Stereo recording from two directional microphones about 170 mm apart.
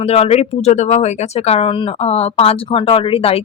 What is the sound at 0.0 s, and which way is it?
Speech, 35° left (ahead or behind).